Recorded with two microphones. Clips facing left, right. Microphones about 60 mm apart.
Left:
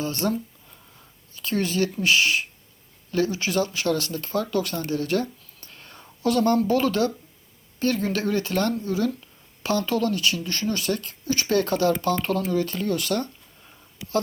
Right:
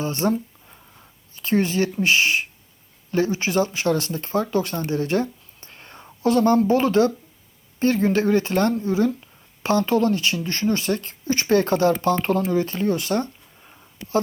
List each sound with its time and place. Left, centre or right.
0.0 s speech: right
0.7 s a sound: right
3.1 s speech: right